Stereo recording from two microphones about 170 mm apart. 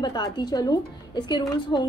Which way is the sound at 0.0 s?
25° left (ahead or behind).